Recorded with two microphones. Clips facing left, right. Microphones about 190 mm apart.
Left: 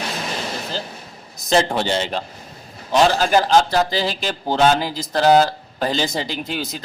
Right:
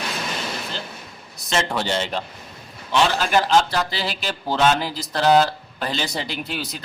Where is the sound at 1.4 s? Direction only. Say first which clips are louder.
Left 5 dB; 35° left (ahead or behind).